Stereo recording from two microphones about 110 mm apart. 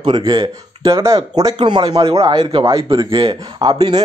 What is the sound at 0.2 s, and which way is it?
A man's voice, 35° right (ahead or behind).